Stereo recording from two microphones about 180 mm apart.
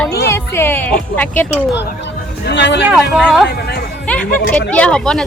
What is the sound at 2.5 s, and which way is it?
Speech, 75° left (ahead or behind).